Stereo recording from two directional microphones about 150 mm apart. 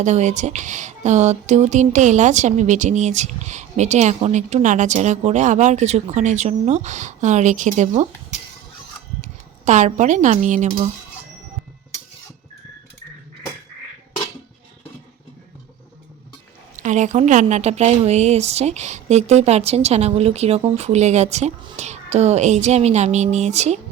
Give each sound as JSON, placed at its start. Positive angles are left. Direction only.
{"t": 0.0, "sound": "speech", "side_deg": -50}
{"t": 9.2, "sound": "speech", "side_deg": -55}
{"t": 16.7, "sound": "speech", "side_deg": -55}